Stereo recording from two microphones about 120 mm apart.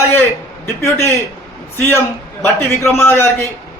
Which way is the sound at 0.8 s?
20° left (ahead or behind).